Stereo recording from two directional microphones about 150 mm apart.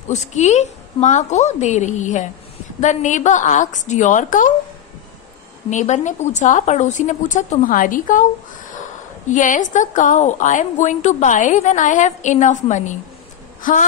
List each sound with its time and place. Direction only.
0.1 s a woman's voice: 50° left (ahead or behind)
5.7 s a woman's voice: 55° left (ahead or behind)
9.3 s a woman's voice: 60° left (ahead or behind)